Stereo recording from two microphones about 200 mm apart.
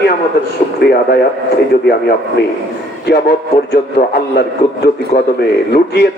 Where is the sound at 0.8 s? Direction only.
55° left (ahead or behind).